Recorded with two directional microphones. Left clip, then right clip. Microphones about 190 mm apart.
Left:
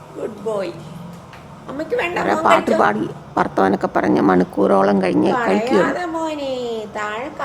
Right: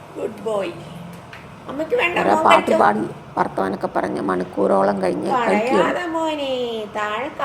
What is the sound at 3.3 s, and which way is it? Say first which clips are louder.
Speech: left 4 dB; 20° left (ahead or behind).